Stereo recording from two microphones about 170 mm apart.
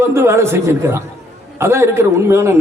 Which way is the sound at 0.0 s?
15° right (ahead or behind).